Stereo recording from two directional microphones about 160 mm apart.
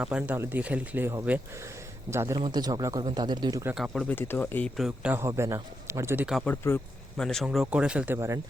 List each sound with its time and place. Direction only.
0.0 s speech: 10° right (ahead or behind); by 3.6 s 25° right (ahead or behind)
3.8 s speech: centre (ahead or behind)
4.1 s speech: 15° left (ahead or behind)
4.8 s speech: 5° right (ahead or behind)
6.2 s speech: centre (ahead or behind)
6.5 s speech: 15° left (ahead or behind)
7.2 s speech: 5° left (ahead or behind); by 8.4 s 15° right (ahead or behind)